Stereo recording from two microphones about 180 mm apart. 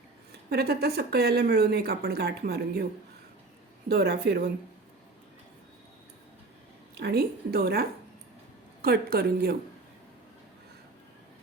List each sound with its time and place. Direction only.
0.5 s speech: 60° right (ahead or behind)
3.8 s speech: 65° right (ahead or behind)
6.9 s speech: 65° right (ahead or behind)